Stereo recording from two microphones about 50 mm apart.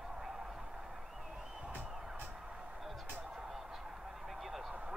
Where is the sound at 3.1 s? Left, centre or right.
Centre.